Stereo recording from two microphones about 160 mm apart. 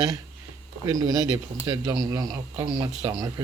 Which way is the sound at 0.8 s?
20° right (ahead or behind).